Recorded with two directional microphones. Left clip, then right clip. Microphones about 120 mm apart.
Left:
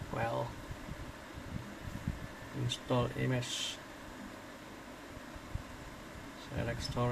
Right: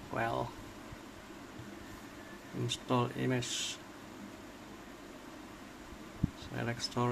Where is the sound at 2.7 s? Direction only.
45° right (ahead or behind).